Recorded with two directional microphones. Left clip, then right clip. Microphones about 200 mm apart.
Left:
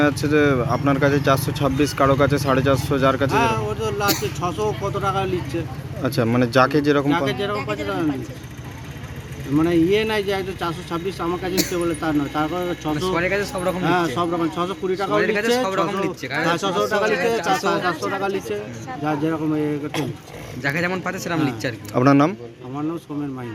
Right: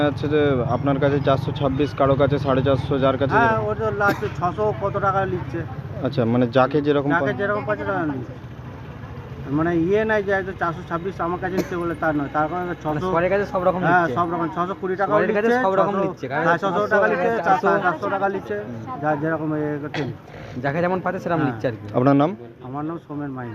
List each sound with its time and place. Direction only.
0.0 s a man's voice: 5° left (ahead or behind)
9.6 s a man's voice: centre (ahead or behind)
13.2 s a man's voice: 20° right (ahead or behind)
13.8 s a man's voice: 10° right (ahead or behind)
16.2 s speech: 35° right (ahead or behind)
16.5 s speech: 5° right (ahead or behind)
17.1 s speech: 40° right (ahead or behind)
17.8 s speech: centre (ahead or behind)
20.6 s a man's voice: 25° right (ahead or behind)
21.9 s speech: centre (ahead or behind)